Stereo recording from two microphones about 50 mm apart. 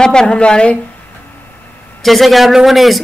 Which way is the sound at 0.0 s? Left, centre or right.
Centre.